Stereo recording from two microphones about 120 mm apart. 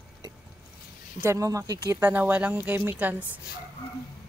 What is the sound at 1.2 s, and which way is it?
Speech, 25° right (ahead or behind).